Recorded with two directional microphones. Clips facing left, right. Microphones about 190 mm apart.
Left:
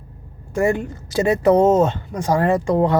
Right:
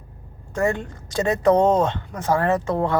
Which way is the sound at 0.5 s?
10° left (ahead or behind).